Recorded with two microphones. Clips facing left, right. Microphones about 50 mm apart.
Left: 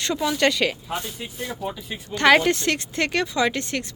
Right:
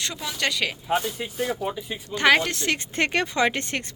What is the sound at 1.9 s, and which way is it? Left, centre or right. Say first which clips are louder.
Speech: left 3 dB; centre.